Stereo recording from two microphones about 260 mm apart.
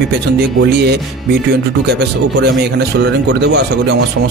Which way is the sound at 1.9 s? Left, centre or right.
Right.